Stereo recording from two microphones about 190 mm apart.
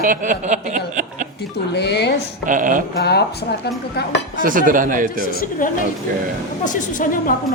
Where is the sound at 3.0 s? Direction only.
60° left (ahead or behind).